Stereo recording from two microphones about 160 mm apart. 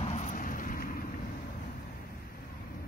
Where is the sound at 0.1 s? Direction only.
50° left (ahead or behind).